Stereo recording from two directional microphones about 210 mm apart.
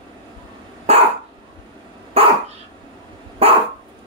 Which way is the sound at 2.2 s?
30° right (ahead or behind).